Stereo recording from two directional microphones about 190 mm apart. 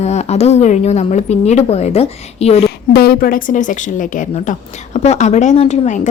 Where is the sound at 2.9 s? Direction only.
55° left (ahead or behind); by 6.1 s 40° left (ahead or behind).